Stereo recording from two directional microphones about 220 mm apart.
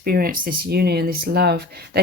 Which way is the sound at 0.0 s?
45° right (ahead or behind).